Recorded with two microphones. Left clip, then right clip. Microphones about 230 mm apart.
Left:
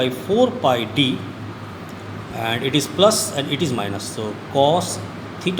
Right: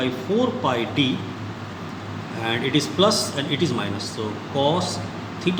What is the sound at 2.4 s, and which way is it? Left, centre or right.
A man's voice, left.